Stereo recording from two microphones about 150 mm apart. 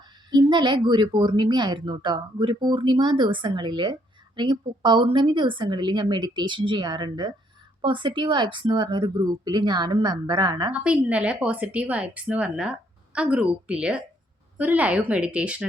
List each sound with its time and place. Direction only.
0.3 s speech: 30° right (ahead or behind)
10.7 s a woman's voice: 10° right (ahead or behind)